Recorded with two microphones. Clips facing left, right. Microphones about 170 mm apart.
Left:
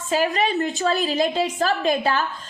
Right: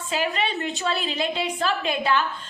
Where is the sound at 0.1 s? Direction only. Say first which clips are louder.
Left 5 dB; 40° left (ahead or behind).